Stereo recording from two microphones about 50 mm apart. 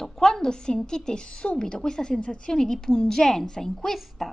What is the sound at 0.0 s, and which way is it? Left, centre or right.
A woman's voice, centre.